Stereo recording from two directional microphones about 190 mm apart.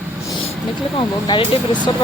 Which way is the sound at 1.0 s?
25° left (ahead or behind).